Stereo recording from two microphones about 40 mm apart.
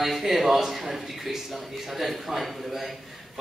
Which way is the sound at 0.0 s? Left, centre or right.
Centre.